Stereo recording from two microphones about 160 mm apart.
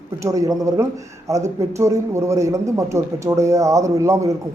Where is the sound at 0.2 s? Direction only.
20° right (ahead or behind).